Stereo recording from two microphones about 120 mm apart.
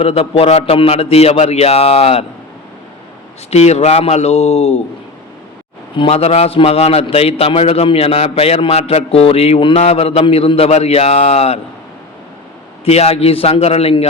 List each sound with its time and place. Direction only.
0.0 s a man's voice: 55° left (ahead or behind)
3.5 s a man's voice: 65° left (ahead or behind)
6.0 s a man's voice: 60° left (ahead or behind)
12.8 s a man's voice: 60° left (ahead or behind)